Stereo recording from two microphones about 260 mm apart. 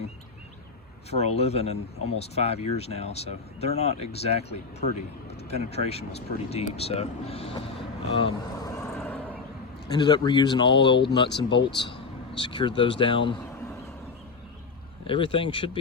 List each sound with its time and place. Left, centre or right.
1.1 s speech: left
8.9 s a sound: centre
9.9 s speech: centre
15.0 s speech: centre